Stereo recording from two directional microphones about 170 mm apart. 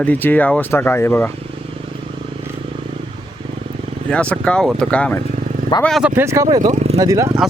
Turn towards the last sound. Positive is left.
turn(degrees=-20)  # may be behind; listen again after turning